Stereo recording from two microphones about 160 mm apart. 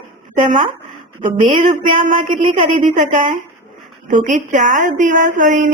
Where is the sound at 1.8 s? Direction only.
55° right (ahead or behind).